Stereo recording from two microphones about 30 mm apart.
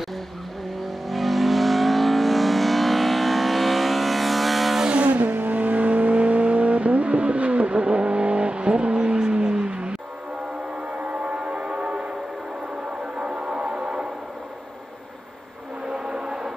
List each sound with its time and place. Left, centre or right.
1.0 s vehicle: centre
5.0 s vehicle: right
11.1 s train: right
13.2 s music: right
15.9 s a sound: right